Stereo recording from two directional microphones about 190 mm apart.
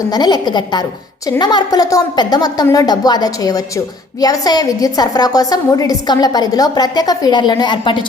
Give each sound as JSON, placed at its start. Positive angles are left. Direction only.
{"t": 0.1, "sound": "a woman's voice", "side_deg": 20}